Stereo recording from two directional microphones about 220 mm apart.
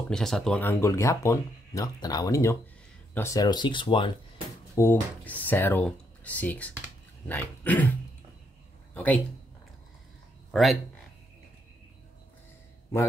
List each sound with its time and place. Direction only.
0.1 s speech: centre (ahead or behind); by 4.1 s 20° left (ahead or behind)
4.7 s speech: 10° left (ahead or behind)
8.9 s speech: 5° left (ahead or behind)
10.5 s speech: centre (ahead or behind)